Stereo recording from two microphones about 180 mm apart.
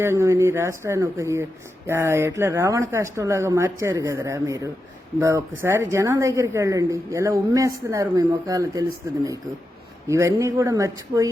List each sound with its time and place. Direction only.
0.0 s a woman's voice: 15° right (ahead or behind)